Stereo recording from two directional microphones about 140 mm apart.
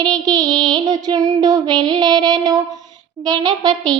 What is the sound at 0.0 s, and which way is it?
Child singing, 30° right (ahead or behind).